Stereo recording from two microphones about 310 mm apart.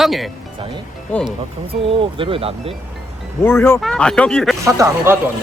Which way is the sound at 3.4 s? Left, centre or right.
Centre.